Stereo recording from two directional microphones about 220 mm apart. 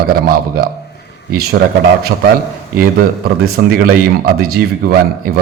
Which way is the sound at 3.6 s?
50° right (ahead or behind).